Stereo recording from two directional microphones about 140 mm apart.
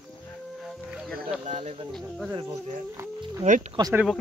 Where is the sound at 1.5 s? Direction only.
50° right (ahead or behind).